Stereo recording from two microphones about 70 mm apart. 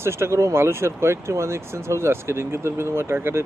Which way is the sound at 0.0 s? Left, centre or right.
Right.